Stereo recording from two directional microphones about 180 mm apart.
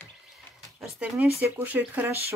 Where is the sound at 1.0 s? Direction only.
5° right (ahead or behind).